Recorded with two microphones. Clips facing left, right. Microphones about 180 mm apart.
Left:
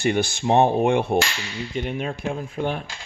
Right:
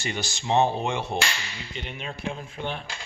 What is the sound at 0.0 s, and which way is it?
Speech, 55° left (ahead or behind).